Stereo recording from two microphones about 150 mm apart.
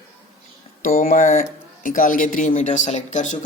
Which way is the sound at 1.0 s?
55° left (ahead or behind).